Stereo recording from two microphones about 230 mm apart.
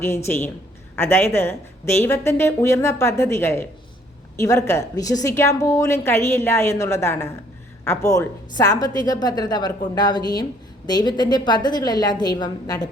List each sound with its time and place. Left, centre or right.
0.0 s a woman's voice: centre